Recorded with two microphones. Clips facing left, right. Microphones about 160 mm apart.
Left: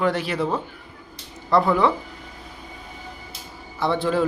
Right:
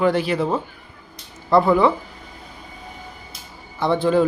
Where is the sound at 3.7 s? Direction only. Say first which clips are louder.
Right 4 dB; centre (ahead or behind).